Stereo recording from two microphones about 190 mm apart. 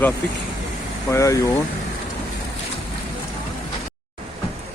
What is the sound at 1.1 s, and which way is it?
Speech, 15° left (ahead or behind).